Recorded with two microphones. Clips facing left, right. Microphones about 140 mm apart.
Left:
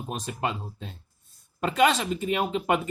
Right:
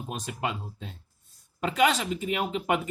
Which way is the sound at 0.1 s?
35° left (ahead or behind).